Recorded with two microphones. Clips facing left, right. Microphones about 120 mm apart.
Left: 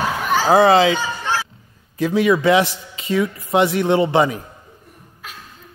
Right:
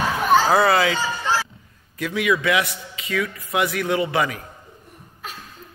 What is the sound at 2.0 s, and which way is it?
A man's voice, 30° left (ahead or behind).